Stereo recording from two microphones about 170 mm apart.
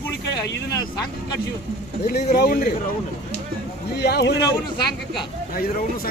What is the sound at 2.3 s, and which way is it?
Speech, 60° left (ahead or behind).